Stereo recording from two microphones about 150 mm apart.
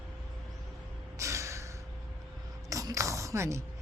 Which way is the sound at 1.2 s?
20° right (ahead or behind).